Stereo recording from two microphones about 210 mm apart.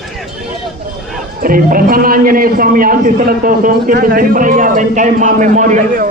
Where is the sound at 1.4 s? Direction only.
45° right (ahead or behind).